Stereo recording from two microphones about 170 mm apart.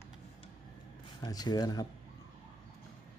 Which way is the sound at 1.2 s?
25° left (ahead or behind).